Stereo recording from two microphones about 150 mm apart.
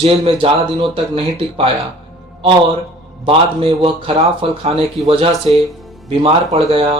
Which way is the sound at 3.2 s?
35° right (ahead or behind).